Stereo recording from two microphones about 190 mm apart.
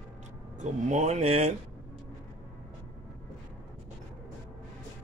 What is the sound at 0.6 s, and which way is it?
Speech, 40° right (ahead or behind).